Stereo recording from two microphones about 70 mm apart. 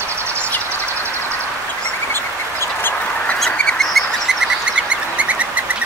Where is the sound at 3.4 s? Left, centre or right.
Centre.